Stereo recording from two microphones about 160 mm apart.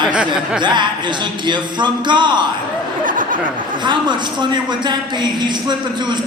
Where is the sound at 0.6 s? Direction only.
30° right (ahead or behind).